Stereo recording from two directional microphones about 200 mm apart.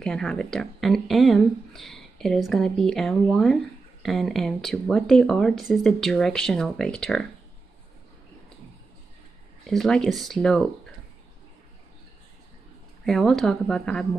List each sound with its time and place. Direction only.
0.0 s speech: 5° left (ahead or behind)
9.7 s speech: centre (ahead or behind)
13.0 s speech: centre (ahead or behind)